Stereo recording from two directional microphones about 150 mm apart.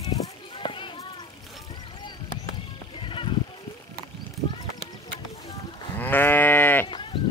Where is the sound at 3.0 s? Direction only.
35° left (ahead or behind).